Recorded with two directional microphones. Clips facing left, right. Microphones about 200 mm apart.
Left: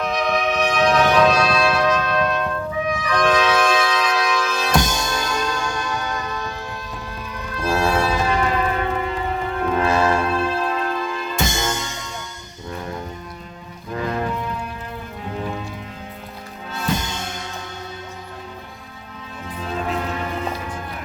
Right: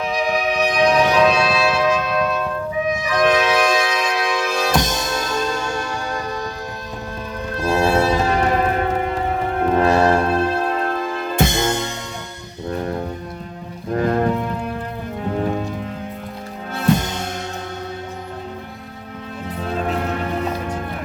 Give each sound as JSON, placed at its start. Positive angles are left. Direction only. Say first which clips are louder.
{"t": 0.0, "sound": "music", "louder": "right 1 dB", "side_deg": -10}
{"t": 1.2, "sound": "trumpet", "louder": "right 1 dB", "side_deg": 0}
{"t": 3.2, "sound": "music", "louder": "right 2 dB", "side_deg": -10}
{"t": 4.7, "sound": "music", "louder": "even", "side_deg": 0}
{"t": 5.0, "sound": "music", "louder": "right 2 dB", "side_deg": -20}
{"t": 7.6, "sound": "music", "louder": "right 3 dB", "side_deg": -25}
{"t": 8.3, "sound": "church bell", "louder": "right 3 dB", "side_deg": -45}
{"t": 13.9, "sound": "music", "louder": "right 6 dB", "side_deg": -45}
{"t": 16.7, "sound": "music", "louder": "right 6 dB", "side_deg": -55}
{"t": 19.7, "sound": "music", "louder": "right 2 dB", "side_deg": -45}